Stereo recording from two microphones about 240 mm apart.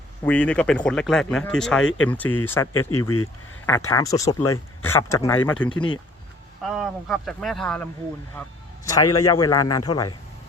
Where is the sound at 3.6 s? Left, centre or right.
Centre.